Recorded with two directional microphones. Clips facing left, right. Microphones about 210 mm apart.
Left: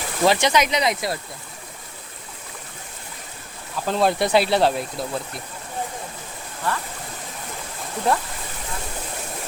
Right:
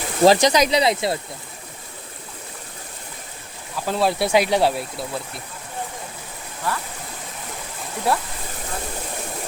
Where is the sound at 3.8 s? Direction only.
5° right (ahead or behind).